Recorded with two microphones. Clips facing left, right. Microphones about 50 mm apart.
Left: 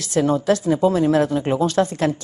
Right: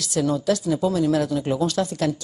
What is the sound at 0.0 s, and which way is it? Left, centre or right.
A woman's voice, left.